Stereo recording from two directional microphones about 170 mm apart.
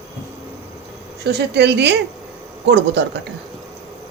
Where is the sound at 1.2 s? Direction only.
75° right (ahead or behind); by 3.2 s 90° right.